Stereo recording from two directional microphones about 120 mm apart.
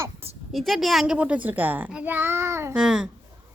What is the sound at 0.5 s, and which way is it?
A child's voice, centre (ahead or behind).